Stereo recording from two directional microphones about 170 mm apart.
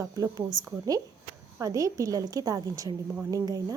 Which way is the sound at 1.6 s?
20° right (ahead or behind).